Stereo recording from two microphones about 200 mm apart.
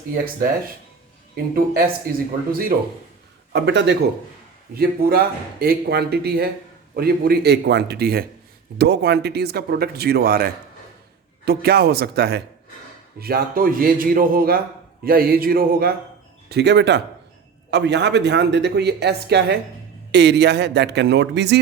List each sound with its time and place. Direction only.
1.5 s speech: 45° right (ahead or behind)
3.5 s speech: 60° right (ahead or behind)